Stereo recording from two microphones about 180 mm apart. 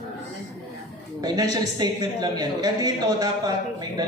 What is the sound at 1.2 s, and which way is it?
A man's voice, 20° right (ahead or behind).